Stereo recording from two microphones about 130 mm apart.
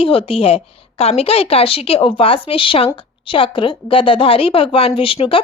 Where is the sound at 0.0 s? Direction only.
45° left (ahead or behind).